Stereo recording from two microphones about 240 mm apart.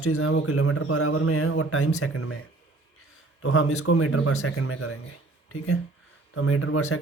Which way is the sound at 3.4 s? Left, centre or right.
Left.